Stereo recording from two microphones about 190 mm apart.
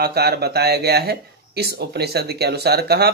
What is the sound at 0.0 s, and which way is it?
Speech, 55° right (ahead or behind).